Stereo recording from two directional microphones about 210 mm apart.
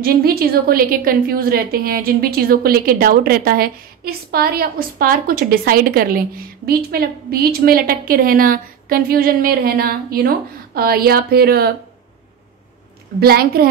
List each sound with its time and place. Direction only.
0.0 s a woman's voice: 45° right (ahead or behind)
13.2 s a woman's voice: 45° right (ahead or behind)